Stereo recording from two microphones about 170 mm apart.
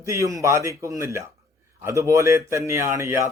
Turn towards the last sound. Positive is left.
turn(degrees=-15)  # may be behind; listen again after turning